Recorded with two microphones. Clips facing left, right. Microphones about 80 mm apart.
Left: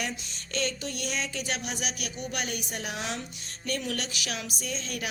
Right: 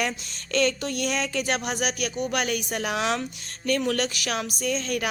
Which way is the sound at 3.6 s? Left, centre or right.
Right.